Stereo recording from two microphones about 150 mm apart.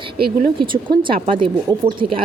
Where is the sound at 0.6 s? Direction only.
35° right (ahead or behind).